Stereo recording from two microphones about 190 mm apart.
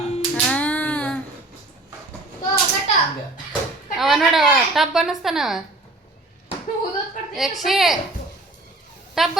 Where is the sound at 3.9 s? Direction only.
Centre (ahead or behind).